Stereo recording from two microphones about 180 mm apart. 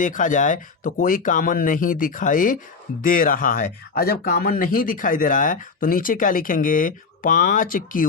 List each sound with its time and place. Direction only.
0.0 s speech: 45° left (ahead or behind)